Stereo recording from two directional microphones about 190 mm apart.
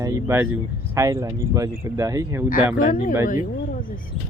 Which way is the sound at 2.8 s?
45° left (ahead or behind).